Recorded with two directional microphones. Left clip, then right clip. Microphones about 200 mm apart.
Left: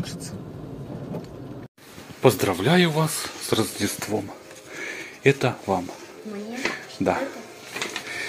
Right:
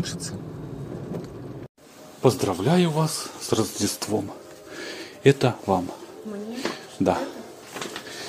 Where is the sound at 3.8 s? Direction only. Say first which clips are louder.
Even; 20° right (ahead or behind).